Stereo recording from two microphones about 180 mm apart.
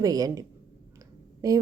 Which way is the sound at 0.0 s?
20° right (ahead or behind).